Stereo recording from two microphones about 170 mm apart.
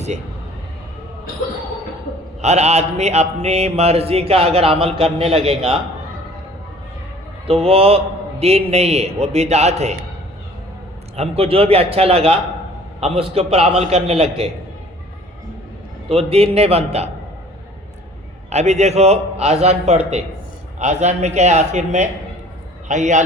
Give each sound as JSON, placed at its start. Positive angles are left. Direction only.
{"t": 2.4, "sound": "mantra", "side_deg": -40}
{"t": 7.4, "sound": "a man's voice", "side_deg": -35}
{"t": 9.2, "sound": "mantra", "side_deg": -40}
{"t": 11.2, "sound": "mantra", "side_deg": -35}
{"t": 16.0, "sound": "mantra", "side_deg": -35}
{"t": 18.5, "sound": "mantra", "side_deg": -40}
{"t": 20.7, "sound": "a man's voice", "side_deg": -40}